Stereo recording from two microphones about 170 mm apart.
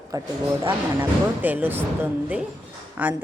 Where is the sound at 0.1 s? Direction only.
20° right (ahead or behind).